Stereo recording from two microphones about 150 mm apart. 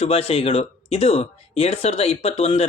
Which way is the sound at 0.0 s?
40° left (ahead or behind).